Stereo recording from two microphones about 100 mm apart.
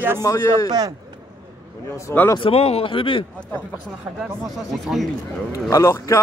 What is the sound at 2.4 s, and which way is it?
Speech, 85° left.